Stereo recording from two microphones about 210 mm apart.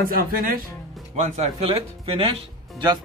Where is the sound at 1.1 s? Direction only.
35° right (ahead or behind).